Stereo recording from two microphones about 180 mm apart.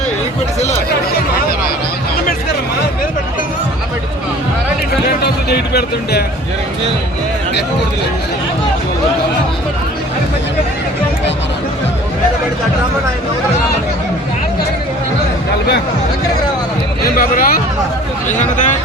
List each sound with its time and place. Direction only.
5.0 s speech: 60° left (ahead or behind)
17.2 s speech: 55° left (ahead or behind)